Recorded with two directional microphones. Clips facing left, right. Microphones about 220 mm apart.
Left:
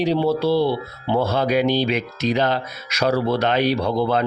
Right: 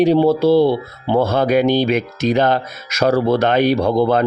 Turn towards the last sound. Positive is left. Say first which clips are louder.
# right 5 dB
turn(degrees=-50)  # may be behind; listen again after turning